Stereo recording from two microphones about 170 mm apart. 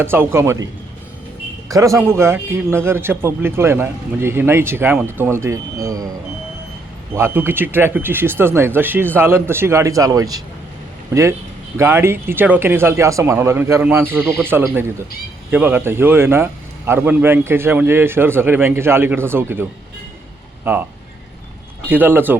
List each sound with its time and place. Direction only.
0.0 s a man's voice: 15° right (ahead or behind)
7.1 s a man's voice: 15° right (ahead or behind)
14.2 s speech: 5° left (ahead or behind)
14.4 s a man's voice: 15° right (ahead or behind)
20.7 s a man's voice: 15° right (ahead or behind)
21.8 s a man's voice: 10° right (ahead or behind)